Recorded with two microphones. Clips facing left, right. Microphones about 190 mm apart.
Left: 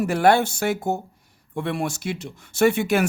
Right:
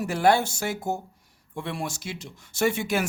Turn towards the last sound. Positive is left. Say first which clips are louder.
# left 6 dB
turn(degrees=60)  # may be behind; listen again after turning